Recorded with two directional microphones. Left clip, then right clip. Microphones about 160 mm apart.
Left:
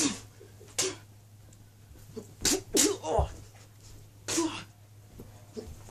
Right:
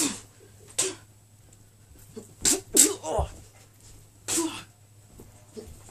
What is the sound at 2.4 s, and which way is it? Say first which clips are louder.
Beatboxing: right 2 dB; 5° right (ahead or behind).